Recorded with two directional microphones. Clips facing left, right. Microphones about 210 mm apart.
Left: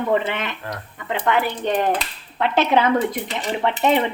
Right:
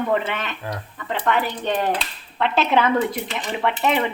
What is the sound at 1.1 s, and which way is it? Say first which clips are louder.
Speech: left 2 dB; 15° left (ahead or behind).